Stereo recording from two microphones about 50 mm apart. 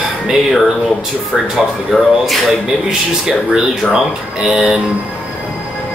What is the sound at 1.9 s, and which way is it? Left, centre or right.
Speech, centre.